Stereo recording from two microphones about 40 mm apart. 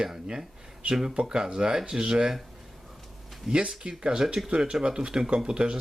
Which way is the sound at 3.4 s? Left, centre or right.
Centre.